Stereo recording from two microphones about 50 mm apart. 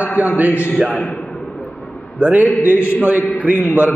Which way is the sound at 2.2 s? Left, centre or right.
Right.